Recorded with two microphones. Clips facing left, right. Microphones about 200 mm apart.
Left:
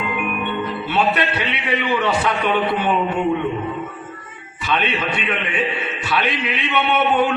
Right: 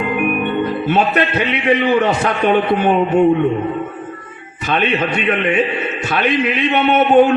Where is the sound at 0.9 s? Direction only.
45° right (ahead or behind).